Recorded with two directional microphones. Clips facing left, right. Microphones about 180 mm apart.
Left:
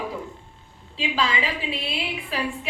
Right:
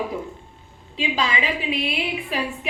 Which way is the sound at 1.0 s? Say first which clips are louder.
Right 1 dB; 15° right (ahead or behind).